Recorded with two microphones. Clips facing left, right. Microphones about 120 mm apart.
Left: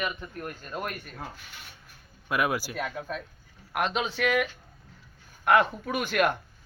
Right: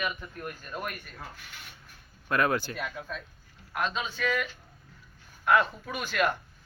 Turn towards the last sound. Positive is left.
turn(degrees=55)  # may be behind; listen again after turning